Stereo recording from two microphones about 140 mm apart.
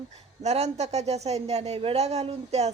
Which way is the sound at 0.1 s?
50° right (ahead or behind).